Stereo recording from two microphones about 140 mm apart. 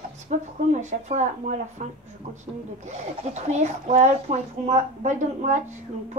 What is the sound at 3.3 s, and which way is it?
A woman's voice, 55° right (ahead or behind).